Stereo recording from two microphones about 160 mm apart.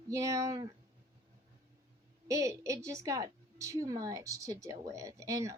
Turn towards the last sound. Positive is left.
turn(degrees=-20)  # may be behind; listen again after turning